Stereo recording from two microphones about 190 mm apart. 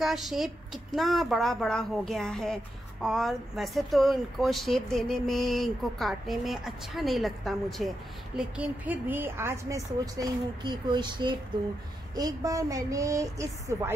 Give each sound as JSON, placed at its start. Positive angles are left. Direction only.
{"t": 0.0, "sound": "a woman's voice", "side_deg": 0}